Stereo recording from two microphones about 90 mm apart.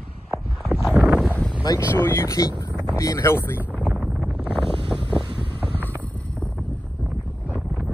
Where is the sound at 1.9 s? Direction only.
25° left (ahead or behind).